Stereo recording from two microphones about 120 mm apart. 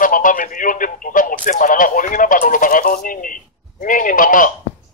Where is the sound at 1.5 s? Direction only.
90° left.